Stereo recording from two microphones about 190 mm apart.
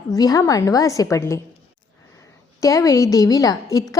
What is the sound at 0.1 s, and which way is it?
A woman's voice, 20° left (ahead or behind).